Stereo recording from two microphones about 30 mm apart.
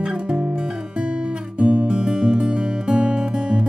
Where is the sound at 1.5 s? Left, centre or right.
Right.